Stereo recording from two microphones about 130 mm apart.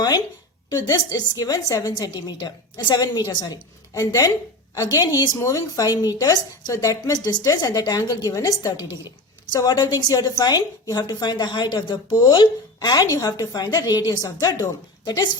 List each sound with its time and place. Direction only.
0.7 s a woman's voice: 30° left (ahead or behind)